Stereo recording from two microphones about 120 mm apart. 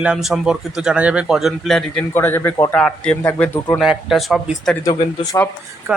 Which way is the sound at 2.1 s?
20° left (ahead or behind).